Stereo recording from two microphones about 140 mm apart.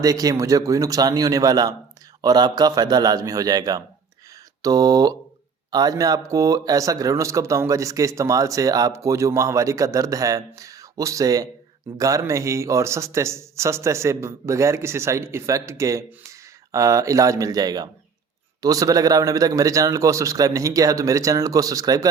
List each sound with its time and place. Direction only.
0.0 s speech: 25° right (ahead or behind)